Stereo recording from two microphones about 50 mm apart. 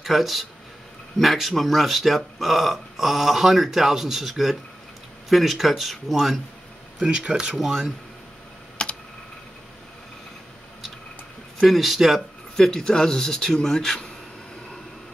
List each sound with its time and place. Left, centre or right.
0.0 s speech: centre
7.0 s speech: right
7.5 s speech: centre
8.8 s computer keyboard: centre
11.6 s speech: centre
12.5 s speech: centre